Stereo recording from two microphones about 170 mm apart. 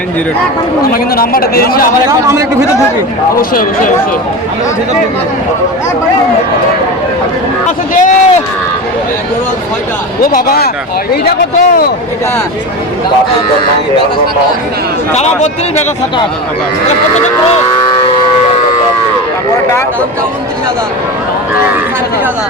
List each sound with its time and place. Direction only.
0.9 s speech: 60° left (ahead or behind)
2.0 s a man's voice: 20° right (ahead or behind)
3.5 s speech: 55° left (ahead or behind)
7.9 s a man's voice: 45° left (ahead or behind)
10.2 s speech: 65° left (ahead or behind)
15.1 s a man's voice: 45° left (ahead or behind)
17.8 s a sound: 25° left (ahead or behind)